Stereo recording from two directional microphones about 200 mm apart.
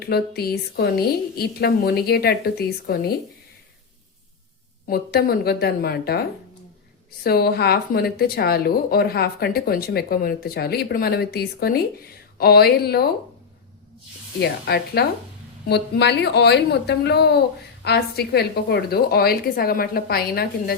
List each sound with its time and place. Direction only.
0.0 s speech: 50° left (ahead or behind)
4.9 s speech: 50° left (ahead or behind)
7.3 s speech: 50° left (ahead or behind)
14.3 s speech: 55° left (ahead or behind)